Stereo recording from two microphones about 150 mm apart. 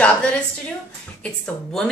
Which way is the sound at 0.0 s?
10° left (ahead or behind).